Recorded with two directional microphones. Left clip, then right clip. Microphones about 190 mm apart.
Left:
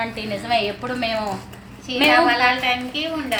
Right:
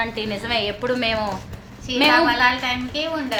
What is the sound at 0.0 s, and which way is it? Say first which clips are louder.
A woman's voice: right 1 dB; 20° right (ahead or behind).